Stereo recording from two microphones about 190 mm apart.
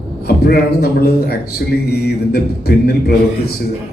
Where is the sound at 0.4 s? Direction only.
55° left (ahead or behind).